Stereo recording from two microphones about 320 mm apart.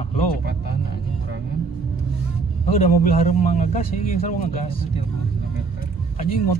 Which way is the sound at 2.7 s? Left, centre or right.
Left.